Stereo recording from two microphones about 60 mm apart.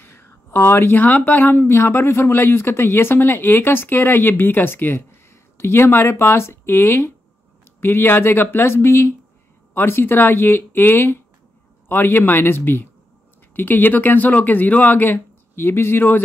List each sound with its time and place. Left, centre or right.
0.0 s speech: left